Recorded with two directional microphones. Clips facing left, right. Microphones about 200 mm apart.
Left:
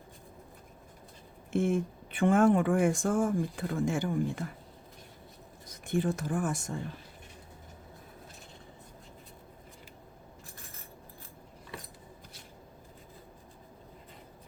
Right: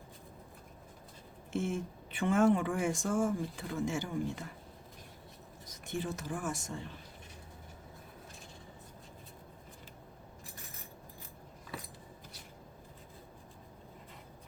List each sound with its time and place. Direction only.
1.5 s speech: 55° left (ahead or behind)
5.8 s speech: 55° left (ahead or behind)